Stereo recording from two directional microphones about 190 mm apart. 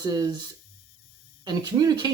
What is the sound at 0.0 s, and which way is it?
Speech, 20° right (ahead or behind).